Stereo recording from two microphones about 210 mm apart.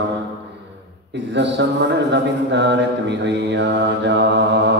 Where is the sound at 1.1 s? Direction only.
60° right (ahead or behind).